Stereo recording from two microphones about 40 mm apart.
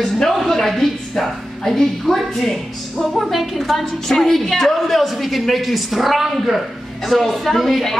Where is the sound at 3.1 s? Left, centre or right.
Centre.